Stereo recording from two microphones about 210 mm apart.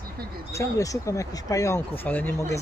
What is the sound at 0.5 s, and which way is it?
Speech, 15° left (ahead or behind).